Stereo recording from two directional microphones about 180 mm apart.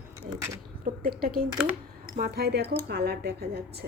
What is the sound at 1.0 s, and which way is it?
Speech, 55° right (ahead or behind).